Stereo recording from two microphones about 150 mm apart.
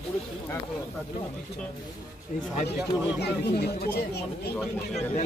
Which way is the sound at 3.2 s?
90° left.